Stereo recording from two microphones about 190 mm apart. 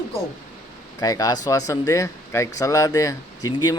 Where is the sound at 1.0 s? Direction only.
20° left (ahead or behind).